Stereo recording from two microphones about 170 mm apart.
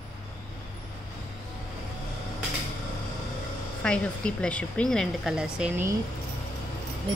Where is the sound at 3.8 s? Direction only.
5° left (ahead or behind).